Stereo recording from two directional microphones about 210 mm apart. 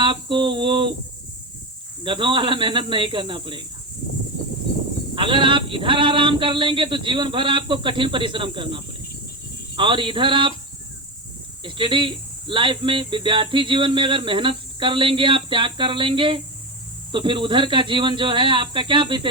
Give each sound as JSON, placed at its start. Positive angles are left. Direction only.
{"t": 0.0, "sound": "a sound", "side_deg": -25}
{"t": 2.0, "sound": "speech", "side_deg": -25}
{"t": 5.1, "sound": "speech", "side_deg": -25}
{"t": 11.6, "sound": "speech", "side_deg": -25}